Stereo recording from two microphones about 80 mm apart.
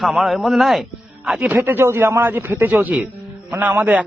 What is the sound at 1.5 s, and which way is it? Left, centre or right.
A man's voice, right.